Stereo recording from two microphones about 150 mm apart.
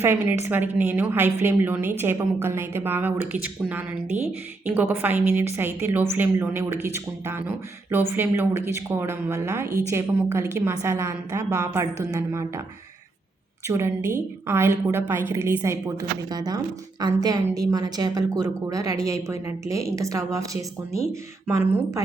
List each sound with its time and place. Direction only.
0.0 s a woman's voice: 15° right (ahead or behind)
13.7 s a woman's voice: 15° right (ahead or behind)